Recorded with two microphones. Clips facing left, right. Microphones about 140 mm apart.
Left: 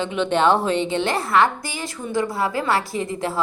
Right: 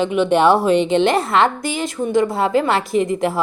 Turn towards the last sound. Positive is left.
turn(degrees=-20)  # may be behind; listen again after turning